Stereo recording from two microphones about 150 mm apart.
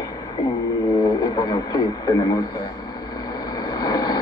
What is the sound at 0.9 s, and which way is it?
A man's voice, 25° left (ahead or behind).